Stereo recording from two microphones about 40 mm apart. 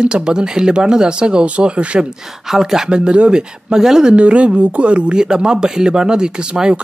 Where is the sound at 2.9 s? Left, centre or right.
Right.